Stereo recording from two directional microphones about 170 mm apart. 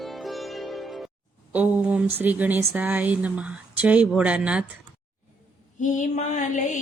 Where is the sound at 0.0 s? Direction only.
Centre (ahead or behind).